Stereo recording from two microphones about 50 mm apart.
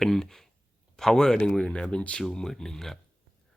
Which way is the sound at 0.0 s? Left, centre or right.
Centre.